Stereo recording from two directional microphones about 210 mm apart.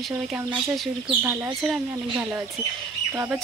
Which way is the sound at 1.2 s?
10° right (ahead or behind).